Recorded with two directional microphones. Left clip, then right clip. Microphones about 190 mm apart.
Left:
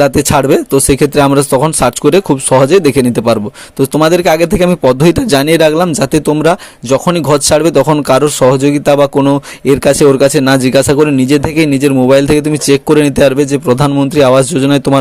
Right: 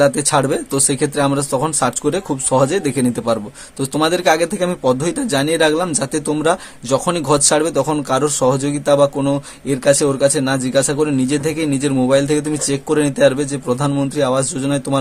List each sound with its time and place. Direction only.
0.0 s a man's voice: 35° left (ahead or behind)